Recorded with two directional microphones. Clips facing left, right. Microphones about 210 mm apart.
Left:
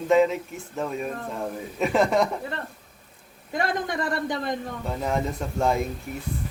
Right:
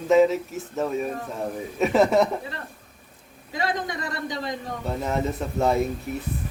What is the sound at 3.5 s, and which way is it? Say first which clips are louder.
A man's voice: left 1 dB; 55° left (ahead or behind).